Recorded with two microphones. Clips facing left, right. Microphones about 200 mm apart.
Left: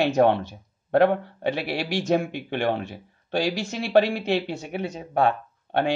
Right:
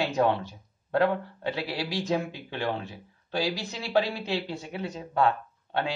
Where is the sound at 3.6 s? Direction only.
65° left (ahead or behind).